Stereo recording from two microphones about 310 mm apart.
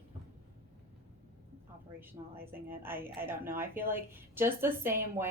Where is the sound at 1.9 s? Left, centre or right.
Centre.